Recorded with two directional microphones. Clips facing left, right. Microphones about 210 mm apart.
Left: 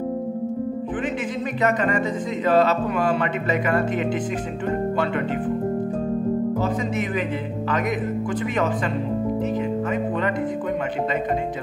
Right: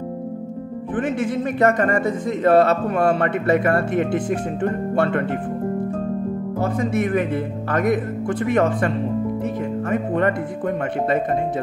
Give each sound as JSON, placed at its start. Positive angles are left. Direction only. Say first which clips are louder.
{"t": 2.4, "sound": "speech", "louder": "right 3 dB", "side_deg": -60}
{"t": 6.6, "sound": "speech", "louder": "right 3 dB", "side_deg": -55}